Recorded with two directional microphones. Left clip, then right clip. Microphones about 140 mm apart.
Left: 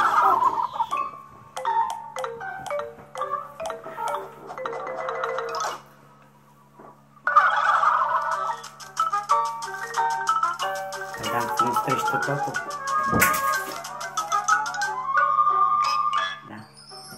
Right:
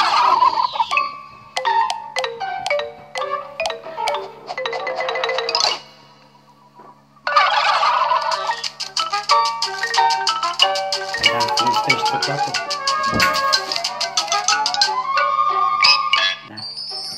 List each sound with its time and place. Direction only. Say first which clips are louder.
0.0 s fowl: right 5 dB; 20° right (ahead or behind)
7.2 s fowl: right 3 dB; 20° right (ahead or behind)
12.1 s music: right 5 dB; 20° right (ahead or behind)